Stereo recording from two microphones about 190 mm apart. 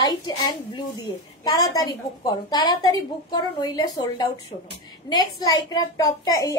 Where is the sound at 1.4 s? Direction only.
20° left (ahead or behind).